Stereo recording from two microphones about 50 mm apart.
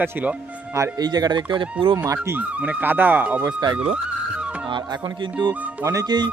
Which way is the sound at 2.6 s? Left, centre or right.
Right.